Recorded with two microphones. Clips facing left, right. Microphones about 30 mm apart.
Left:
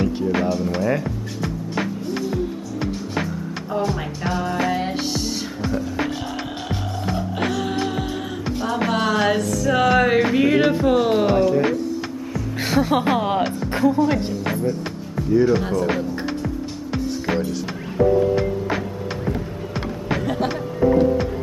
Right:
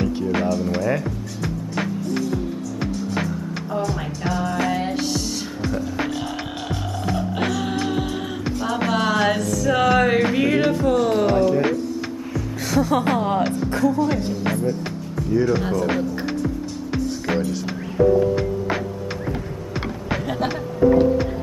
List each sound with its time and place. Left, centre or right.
0.0 s music: centre
4.3 s music: centre
10.7 s music: centre
12.6 s music: left
14.3 s speech: centre
15.3 s music: centre
20.1 s music: centre